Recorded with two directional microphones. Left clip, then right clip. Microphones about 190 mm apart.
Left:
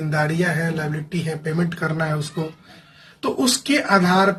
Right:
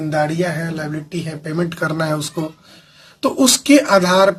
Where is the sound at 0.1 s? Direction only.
25° right (ahead or behind).